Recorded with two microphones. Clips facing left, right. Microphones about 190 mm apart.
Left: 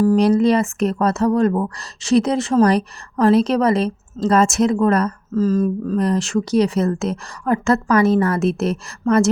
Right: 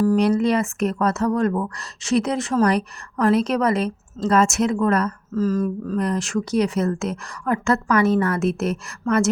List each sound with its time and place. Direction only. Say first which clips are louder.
0.2 s speech: left 4 dB; 35° left (ahead or behind)
5.4 s speech: left 4 dB; 25° left (ahead or behind)